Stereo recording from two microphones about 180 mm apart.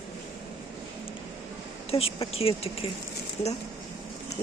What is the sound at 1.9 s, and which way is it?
Speech, 30° left (ahead or behind).